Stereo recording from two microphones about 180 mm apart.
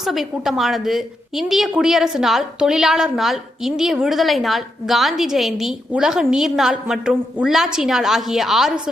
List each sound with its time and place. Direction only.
0.0 s a woman's voice: centre (ahead or behind)